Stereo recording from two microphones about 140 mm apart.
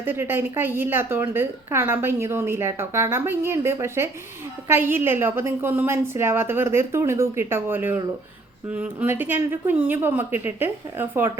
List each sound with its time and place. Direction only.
0.0 s a woman's voice: 15° right (ahead or behind)